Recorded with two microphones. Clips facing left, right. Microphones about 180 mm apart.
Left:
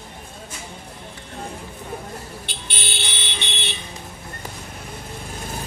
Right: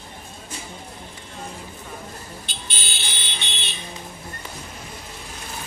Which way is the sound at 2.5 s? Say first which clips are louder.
Left 3 dB; 65° left (ahead or behind).